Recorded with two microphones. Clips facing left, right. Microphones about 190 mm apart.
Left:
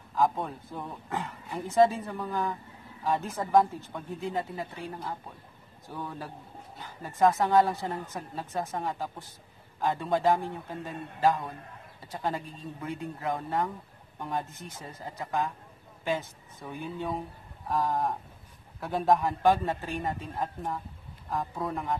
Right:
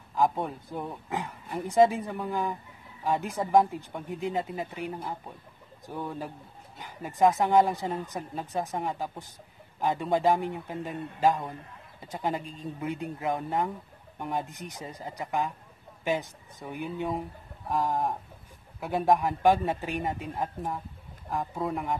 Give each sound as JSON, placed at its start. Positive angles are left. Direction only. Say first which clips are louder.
{"t": 0.1, "sound": "speech", "louder": "right 1 dB", "side_deg": -15}